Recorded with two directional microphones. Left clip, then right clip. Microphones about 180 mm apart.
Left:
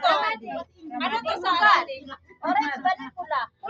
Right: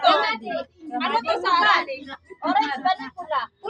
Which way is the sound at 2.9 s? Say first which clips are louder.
Right 2 dB; 10° right (ahead or behind).